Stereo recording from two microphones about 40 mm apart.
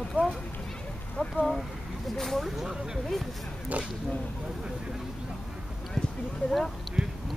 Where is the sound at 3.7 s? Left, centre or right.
Right.